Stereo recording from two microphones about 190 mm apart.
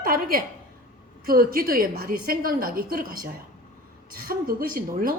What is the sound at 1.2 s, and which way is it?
A woman's voice, 50° right (ahead or behind).